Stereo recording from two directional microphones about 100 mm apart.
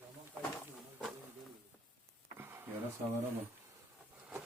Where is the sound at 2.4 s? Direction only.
25° right (ahead or behind).